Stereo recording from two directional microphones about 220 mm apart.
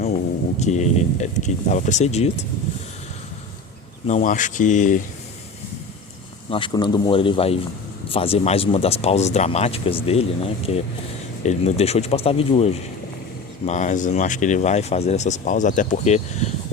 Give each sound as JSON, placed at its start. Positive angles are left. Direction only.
{"t": 0.6, "sound": "speech", "side_deg": 30}
{"t": 4.0, "sound": "speech", "side_deg": 35}
{"t": 6.5, "sound": "speech", "side_deg": 20}